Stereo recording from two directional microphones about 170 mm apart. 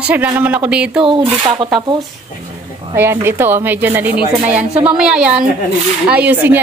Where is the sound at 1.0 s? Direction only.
30° right (ahead or behind).